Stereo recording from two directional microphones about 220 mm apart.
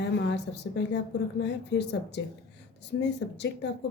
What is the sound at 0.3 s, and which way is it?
A woman's voice, 50° left (ahead or behind).